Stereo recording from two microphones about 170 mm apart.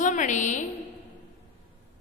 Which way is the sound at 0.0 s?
45° left (ahead or behind).